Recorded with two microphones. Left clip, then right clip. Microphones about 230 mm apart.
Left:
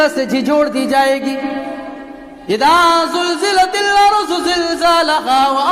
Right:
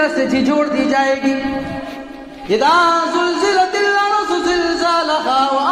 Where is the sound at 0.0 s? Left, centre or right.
Left.